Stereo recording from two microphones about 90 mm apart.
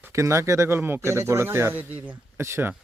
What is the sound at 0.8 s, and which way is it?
Speech, 25° right (ahead or behind).